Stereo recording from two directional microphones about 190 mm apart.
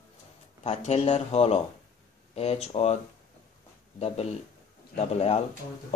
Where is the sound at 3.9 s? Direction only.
30° left (ahead or behind).